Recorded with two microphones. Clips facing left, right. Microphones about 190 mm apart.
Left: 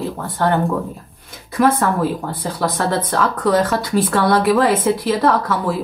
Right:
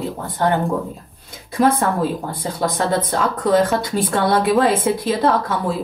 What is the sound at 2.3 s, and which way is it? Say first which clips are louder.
Speech: even; 15° right (ahead or behind).